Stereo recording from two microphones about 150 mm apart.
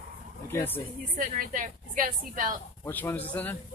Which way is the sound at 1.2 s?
65° right (ahead or behind).